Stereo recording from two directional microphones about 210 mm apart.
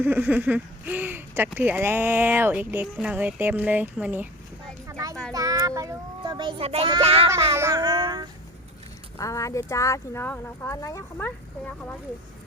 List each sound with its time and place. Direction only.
0.0 s speech: 10° right (ahead or behind)
4.9 s child singing: 15° right (ahead or behind)
5.3 s a child's voice: 15° right (ahead or behind)
7.3 s speech: 15° right (ahead or behind)
9.1 s speech: 15° left (ahead or behind)